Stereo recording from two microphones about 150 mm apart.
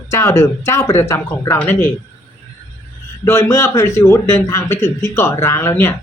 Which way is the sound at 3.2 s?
15° left (ahead or behind).